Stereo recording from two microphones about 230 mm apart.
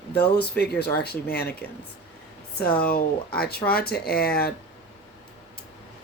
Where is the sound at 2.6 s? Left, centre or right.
Left.